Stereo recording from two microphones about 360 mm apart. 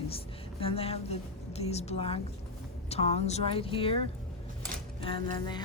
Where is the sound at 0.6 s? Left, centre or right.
Centre.